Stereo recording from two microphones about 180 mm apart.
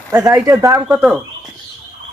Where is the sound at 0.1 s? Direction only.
15° right (ahead or behind).